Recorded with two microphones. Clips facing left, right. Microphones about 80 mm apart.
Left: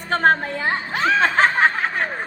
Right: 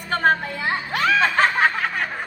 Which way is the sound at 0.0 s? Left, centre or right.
Left.